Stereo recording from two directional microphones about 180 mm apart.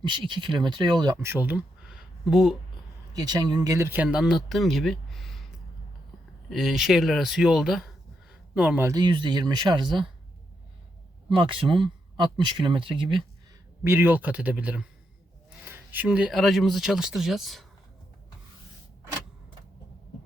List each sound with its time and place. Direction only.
0.0 s speech: 25° right (ahead or behind); by 2.6 s centre (ahead or behind)
3.1 s speech: 20° right (ahead or behind); by 5.4 s centre (ahead or behind)
6.5 s speech: centre (ahead or behind); by 9.8 s 25° right (ahead or behind)
11.3 s speech: 30° right (ahead or behind)
13.8 s speech: 10° right (ahead or behind)